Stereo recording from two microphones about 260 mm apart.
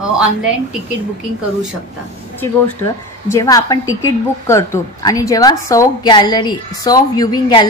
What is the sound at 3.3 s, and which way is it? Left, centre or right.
A woman's voice, centre.